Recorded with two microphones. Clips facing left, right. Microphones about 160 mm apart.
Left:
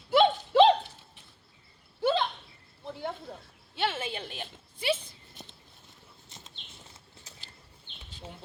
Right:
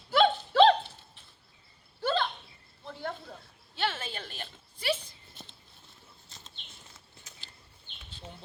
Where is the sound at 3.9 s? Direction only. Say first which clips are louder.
Left 4 dB; 15° left (ahead or behind).